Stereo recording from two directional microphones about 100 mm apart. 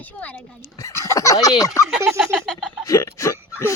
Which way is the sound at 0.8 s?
30° left (ahead or behind).